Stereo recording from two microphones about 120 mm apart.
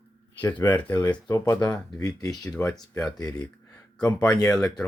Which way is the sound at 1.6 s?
30° left (ahead or behind).